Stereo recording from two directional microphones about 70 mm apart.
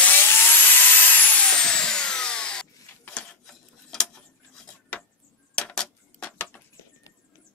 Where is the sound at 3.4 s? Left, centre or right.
Centre.